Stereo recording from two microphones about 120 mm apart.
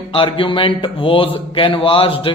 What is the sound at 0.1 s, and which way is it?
A man's voice, 45° left (ahead or behind).